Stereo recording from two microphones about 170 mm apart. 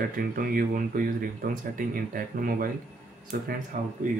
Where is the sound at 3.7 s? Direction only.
50° right (ahead or behind).